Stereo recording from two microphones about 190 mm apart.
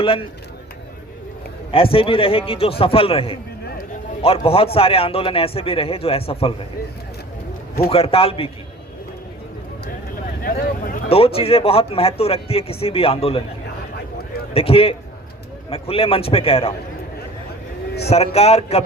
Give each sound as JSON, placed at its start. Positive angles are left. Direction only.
{"t": 0.0, "sound": "a man's voice", "side_deg": 30}
{"t": 1.7, "sound": "a man's voice", "side_deg": 30}
{"t": 7.9, "sound": "a man's voice", "side_deg": 30}
{"t": 11.1, "sound": "a man's voice", "side_deg": 30}
{"t": 13.9, "sound": "vehicle", "side_deg": 55}
{"t": 14.5, "sound": "a man's voice", "side_deg": 30}
{"t": 18.1, "sound": "a man's voice", "side_deg": 35}